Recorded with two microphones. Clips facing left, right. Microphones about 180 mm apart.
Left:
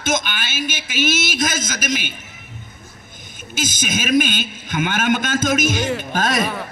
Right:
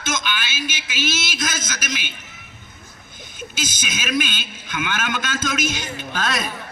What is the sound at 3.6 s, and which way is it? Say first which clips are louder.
A man's voice: left 7 dB; 50° left (ahead or behind).